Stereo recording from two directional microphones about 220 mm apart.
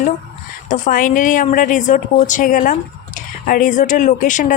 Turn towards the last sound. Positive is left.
turn(degrees=35)  # may be behind; listen again after turning